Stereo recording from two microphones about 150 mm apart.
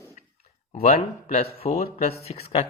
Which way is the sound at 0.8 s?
45° left (ahead or behind).